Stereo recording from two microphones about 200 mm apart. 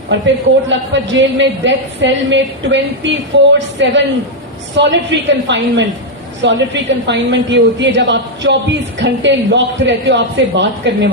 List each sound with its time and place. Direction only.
0.1 s a woman's voice: 65° right (ahead or behind)